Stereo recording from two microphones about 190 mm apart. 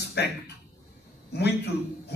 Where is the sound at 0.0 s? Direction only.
60° left (ahead or behind).